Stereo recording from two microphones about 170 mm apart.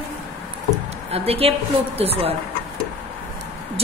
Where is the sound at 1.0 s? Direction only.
35° right (ahead or behind).